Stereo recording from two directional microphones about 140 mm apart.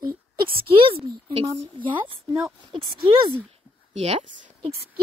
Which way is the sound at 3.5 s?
45° right (ahead or behind).